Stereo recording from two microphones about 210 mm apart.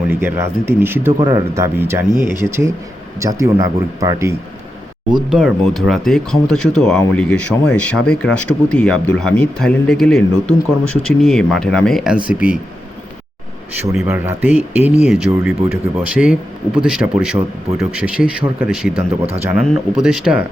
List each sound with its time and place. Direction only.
0.1 s speech: 10° right (ahead or behind)
5.3 s speech: 5° right (ahead or behind)
13.9 s speech: 5° right (ahead or behind)
18.9 s speech: 30° right (ahead or behind)
19.6 s speech: centre (ahead or behind)